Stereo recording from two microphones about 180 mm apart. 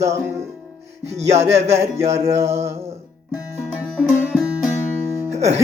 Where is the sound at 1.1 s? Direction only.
35° right (ahead or behind).